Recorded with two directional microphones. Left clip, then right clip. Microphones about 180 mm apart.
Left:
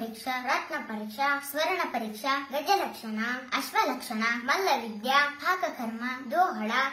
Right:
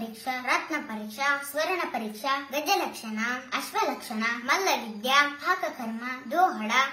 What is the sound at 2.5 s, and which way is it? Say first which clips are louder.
Speech: even; 20° right (ahead or behind).